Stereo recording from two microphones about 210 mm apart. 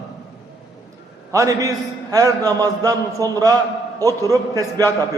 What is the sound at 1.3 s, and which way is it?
A man's voice, 15° right (ahead or behind).